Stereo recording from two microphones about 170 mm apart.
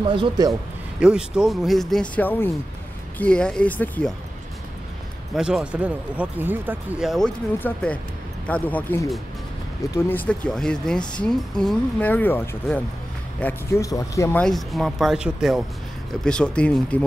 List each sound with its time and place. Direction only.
0.1 s a man's voice: 25° right (ahead or behind)
0.9 s speech: 5° right (ahead or behind)
5.3 s speech: 5° right (ahead or behind); by 14.4 s 15° left (ahead or behind)
14.4 s speech: centre (ahead or behind)